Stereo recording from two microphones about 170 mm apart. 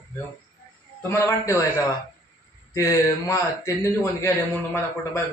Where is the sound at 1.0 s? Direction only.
15° left (ahead or behind).